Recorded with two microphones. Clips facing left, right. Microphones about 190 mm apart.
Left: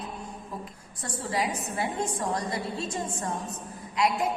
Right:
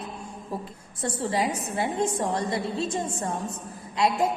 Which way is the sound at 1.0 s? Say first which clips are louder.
Right 4 dB; 25° right (ahead or behind).